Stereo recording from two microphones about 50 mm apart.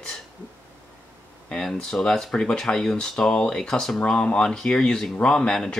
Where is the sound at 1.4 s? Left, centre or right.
Centre.